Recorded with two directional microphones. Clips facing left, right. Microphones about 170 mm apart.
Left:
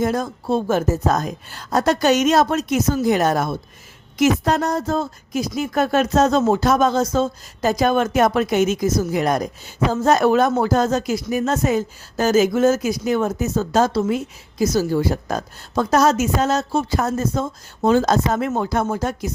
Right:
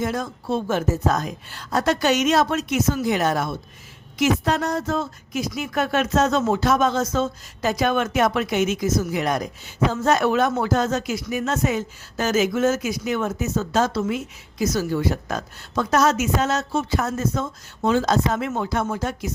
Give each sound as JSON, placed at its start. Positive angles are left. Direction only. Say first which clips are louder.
{"t": 0.0, "sound": "a woman's voice", "louder": "left 4 dB", "side_deg": 40}